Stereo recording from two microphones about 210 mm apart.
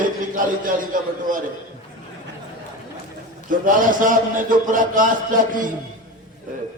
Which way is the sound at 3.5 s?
40° right (ahead or behind).